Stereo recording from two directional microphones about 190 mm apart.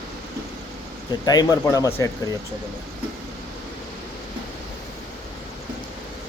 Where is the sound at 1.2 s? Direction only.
20° left (ahead or behind).